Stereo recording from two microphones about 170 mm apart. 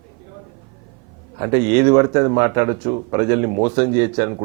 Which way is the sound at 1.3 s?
20° right (ahead or behind).